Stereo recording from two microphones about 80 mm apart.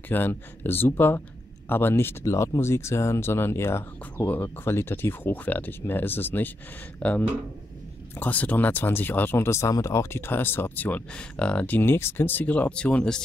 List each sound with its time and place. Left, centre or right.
0.1 s speech: left; by 13.2 s centre